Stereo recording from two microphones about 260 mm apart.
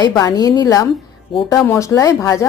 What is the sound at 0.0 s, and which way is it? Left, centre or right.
Speech, centre.